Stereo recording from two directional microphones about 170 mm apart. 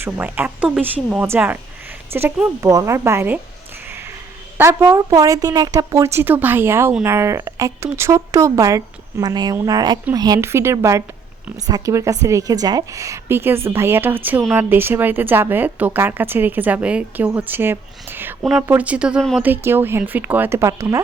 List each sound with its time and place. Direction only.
0.0 s a woman's voice: 10° right (ahead or behind)
4.5 s a woman's voice: 15° right (ahead or behind)
19.4 s a woman's voice: 10° right (ahead or behind)